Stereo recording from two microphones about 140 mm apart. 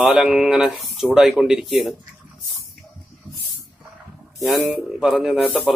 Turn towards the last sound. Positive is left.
turn(degrees=-5)  # may be behind; listen again after turning